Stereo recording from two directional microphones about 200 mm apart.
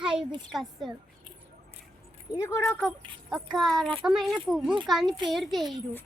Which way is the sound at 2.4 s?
15° left (ahead or behind).